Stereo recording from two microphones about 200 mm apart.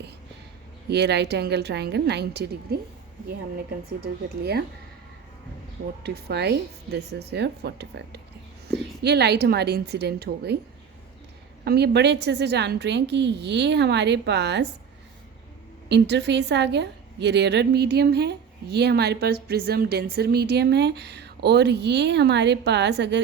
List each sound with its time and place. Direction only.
0.9 s a woman's voice: 55° right (ahead or behind)
6.0 s a woman's voice: 55° right (ahead or behind)
11.6 s a woman's voice: 55° right (ahead or behind)
15.9 s a woman's voice: 60° right (ahead or behind)